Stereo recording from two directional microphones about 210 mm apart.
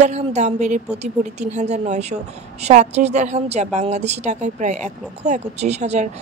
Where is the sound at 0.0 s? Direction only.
35° right (ahead or behind).